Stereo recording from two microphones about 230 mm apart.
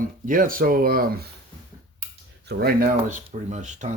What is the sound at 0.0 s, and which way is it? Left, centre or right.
Speech, right.